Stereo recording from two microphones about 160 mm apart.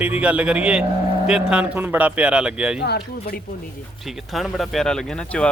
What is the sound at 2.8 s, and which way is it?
Speech, 90° left.